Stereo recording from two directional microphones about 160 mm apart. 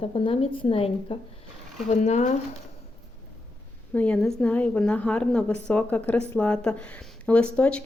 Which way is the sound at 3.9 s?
5° left (ahead or behind).